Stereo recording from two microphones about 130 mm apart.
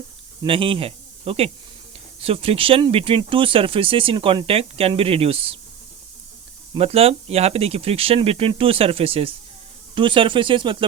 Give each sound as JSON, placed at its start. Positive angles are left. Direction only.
{"t": 0.4, "sound": "speech", "side_deg": -40}
{"t": 6.7, "sound": "speech", "side_deg": -50}